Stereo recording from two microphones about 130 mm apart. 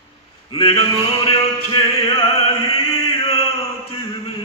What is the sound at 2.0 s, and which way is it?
Chant, 45° left (ahead or behind).